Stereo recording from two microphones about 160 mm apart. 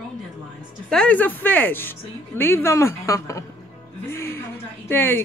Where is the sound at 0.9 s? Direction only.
5° left (ahead or behind).